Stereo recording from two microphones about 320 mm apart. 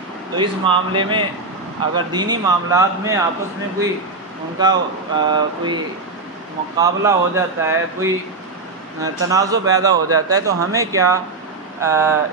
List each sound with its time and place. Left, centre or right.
0.4 s a man's voice: centre
4.6 s a man's voice: centre
6.8 s a man's voice: centre